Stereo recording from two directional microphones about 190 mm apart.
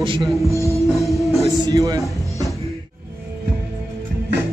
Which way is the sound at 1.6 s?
20° right (ahead or behind).